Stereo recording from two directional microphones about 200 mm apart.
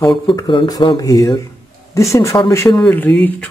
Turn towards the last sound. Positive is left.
turn(degrees=10)  # may be behind; listen again after turning